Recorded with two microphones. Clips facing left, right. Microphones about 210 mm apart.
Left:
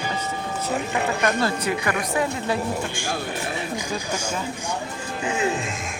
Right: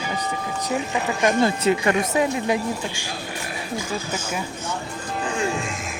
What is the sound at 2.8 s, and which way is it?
Speech, 55° left (ahead or behind).